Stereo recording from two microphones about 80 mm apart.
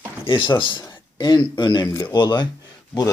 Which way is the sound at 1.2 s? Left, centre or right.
Left.